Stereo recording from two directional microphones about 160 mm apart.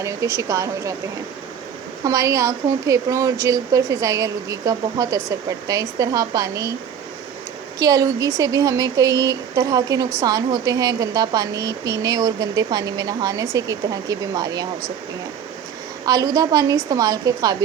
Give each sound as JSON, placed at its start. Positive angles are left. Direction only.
{"t": 0.0, "sound": "a woman's voice", "side_deg": -20}
{"t": 2.0, "sound": "a woman's voice", "side_deg": -20}
{"t": 7.8, "sound": "a woman's voice", "side_deg": -25}
{"t": 16.0, "sound": "a woman's voice", "side_deg": -20}